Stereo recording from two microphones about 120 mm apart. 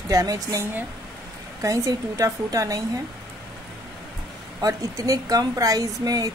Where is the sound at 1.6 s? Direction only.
30° right (ahead or behind).